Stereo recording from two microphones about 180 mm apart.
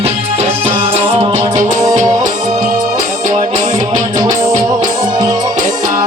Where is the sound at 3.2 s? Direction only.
45° right (ahead or behind).